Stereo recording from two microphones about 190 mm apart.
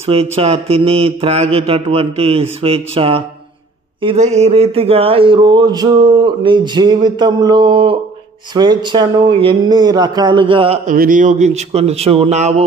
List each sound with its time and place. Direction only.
0.0 s mantra: 30° right (ahead or behind)
2.6 s speech: 30° right (ahead or behind)
10.9 s mantra: 45° right (ahead or behind)